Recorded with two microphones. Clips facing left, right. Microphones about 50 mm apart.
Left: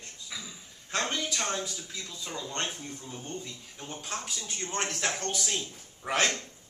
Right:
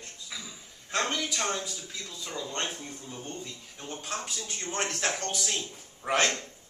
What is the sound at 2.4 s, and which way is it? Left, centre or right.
Speech, centre.